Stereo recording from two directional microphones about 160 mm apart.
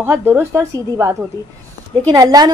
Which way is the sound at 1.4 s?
20° left (ahead or behind).